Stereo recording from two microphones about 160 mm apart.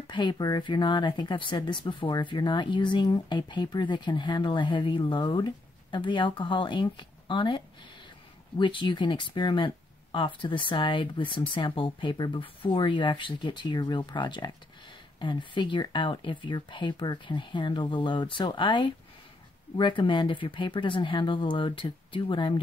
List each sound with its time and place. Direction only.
0.1 s speech: 30° left (ahead or behind)